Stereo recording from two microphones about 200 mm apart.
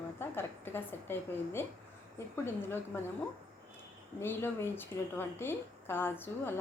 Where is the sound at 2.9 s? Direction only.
10° left (ahead or behind).